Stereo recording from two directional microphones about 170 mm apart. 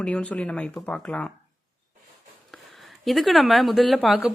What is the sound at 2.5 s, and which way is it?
Speech, centre (ahead or behind).